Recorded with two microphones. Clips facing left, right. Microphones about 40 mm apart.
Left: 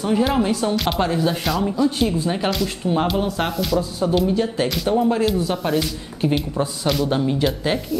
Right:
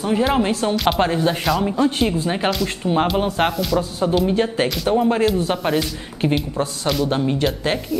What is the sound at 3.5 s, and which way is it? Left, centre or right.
Speech, centre.